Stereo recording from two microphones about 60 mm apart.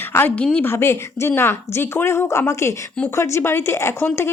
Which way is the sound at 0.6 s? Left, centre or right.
Left.